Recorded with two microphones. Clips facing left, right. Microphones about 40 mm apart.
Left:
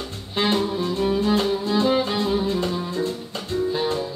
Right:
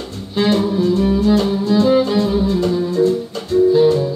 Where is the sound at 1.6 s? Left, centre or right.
Left.